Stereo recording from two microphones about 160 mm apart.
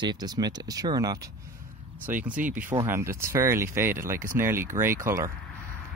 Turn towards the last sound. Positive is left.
turn(degrees=-20)  # may be behind; listen again after turning